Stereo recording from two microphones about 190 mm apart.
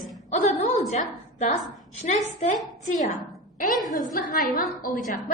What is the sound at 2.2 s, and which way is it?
Speech, 40° left (ahead or behind).